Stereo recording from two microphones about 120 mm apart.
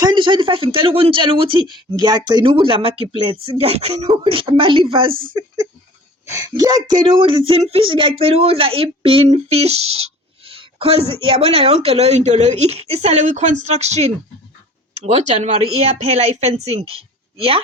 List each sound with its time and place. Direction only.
0.0 s speech: 40° right (ahead or behind)
6.2 s speech: 25° right (ahead or behind)
7.2 s speech: 50° right (ahead or behind)
10.4 s a sound: 50° right (ahead or behind)
11.2 s speech: 50° right (ahead or behind)